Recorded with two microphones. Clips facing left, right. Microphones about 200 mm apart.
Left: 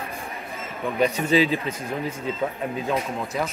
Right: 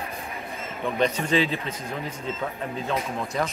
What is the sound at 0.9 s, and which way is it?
A man's voice, 10° left (ahead or behind).